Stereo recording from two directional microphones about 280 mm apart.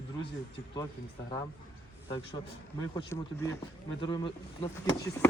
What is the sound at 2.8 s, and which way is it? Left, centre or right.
Speech, centre.